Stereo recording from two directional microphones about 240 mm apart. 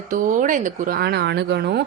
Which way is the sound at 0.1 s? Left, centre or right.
Right.